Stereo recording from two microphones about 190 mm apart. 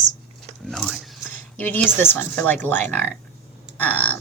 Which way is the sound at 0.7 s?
Centre (ahead or behind).